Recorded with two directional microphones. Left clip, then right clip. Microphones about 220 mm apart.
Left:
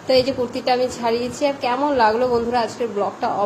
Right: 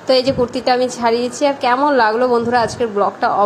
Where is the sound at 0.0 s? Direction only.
15° right (ahead or behind).